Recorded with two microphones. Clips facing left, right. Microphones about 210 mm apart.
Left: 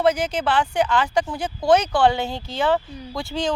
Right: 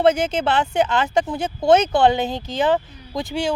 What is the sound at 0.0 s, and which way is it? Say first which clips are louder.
Speech: right 3 dB; 25° right (ahead or behind).